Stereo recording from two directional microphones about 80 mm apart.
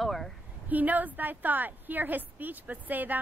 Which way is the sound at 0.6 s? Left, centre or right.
Right.